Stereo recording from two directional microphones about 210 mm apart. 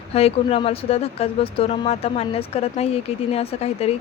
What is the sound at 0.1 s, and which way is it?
Speech, 30° left (ahead or behind).